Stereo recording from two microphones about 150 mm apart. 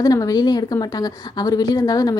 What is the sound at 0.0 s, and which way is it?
A woman's voice, 25° left (ahead or behind).